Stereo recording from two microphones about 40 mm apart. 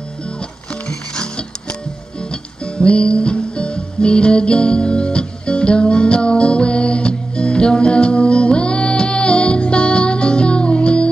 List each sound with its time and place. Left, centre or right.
0.8 s music: left
2.6 s music: left